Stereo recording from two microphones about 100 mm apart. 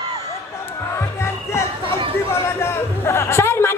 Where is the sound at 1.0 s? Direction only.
25° left (ahead or behind).